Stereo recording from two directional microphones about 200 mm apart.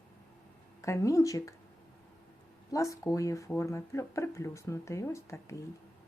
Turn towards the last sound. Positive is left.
turn(degrees=15)  # may be behind; listen again after turning